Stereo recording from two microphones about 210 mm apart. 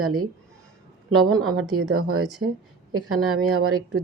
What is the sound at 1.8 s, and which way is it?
A woman's voice, 90° right.